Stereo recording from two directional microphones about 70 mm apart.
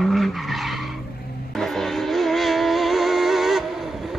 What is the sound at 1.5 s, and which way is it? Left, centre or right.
Music, centre.